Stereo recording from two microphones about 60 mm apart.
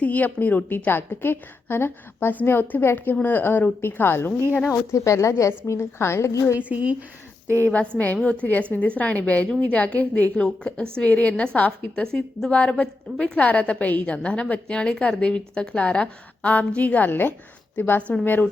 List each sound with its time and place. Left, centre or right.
0.0 s a woman's voice: left
4.7 s a woman's voice: left
6.6 s speech: right
7.4 s a woman's voice: right
7.7 s a woman's voice: left